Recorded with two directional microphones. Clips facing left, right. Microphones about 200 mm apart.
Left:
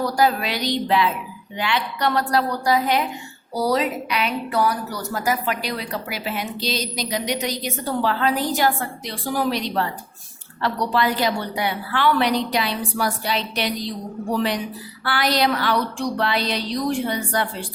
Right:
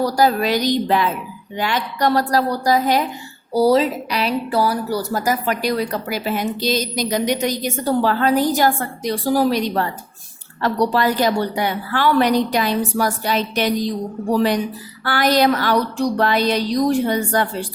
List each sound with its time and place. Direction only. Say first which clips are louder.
0.0 s a woman's voice: right 3 dB; 35° right (ahead or behind)
3.5 s speech: right 6 dB; 30° right (ahead or behind); by 17.7 s 45° right (ahead or behind)